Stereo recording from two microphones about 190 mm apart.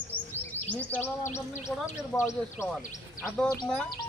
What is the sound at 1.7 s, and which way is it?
Speech, centre (ahead or behind).